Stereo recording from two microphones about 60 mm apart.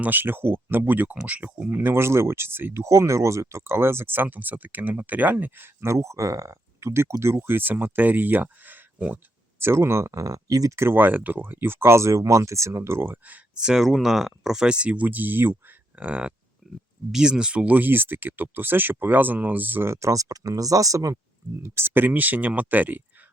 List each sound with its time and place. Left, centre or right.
0.0 s speech: right; by 1.7 s centre
1.7 s speech: right
9.6 s speech: right
10.8 s speech: right
13.6 s speech: centre; by 15.5 s right
16.0 s speech: right
17.1 s speech: centre; by 19.9 s right
19.9 s speech: right
21.6 s speech: right